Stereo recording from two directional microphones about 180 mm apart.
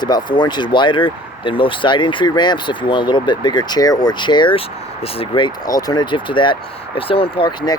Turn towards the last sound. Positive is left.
turn(degrees=25)  # may be behind; listen again after turning